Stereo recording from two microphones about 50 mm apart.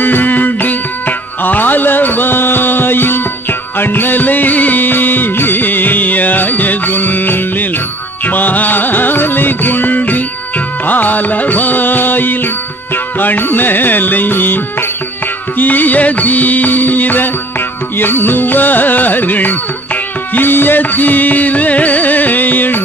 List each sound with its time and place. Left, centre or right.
0.0 s music: left